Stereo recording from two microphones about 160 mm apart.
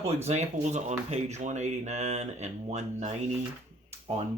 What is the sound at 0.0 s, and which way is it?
Speech, 40° right (ahead or behind).